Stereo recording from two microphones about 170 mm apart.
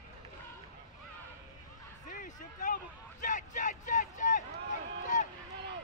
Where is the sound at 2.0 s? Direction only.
50° left (ahead or behind).